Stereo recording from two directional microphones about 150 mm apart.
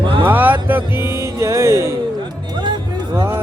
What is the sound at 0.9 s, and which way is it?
Music, 15° right (ahead or behind).